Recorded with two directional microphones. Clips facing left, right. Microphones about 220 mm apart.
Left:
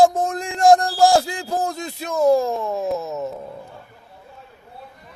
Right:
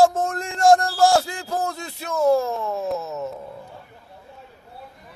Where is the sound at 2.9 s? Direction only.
15° left (ahead or behind).